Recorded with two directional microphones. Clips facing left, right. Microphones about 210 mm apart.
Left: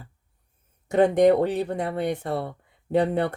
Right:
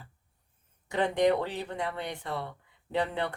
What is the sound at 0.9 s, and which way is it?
Speech, 45° left (ahead or behind).